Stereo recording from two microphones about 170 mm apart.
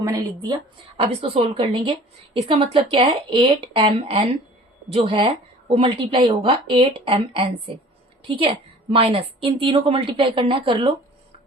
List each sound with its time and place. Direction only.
0.0 s a woman's voice: 20° right (ahead or behind)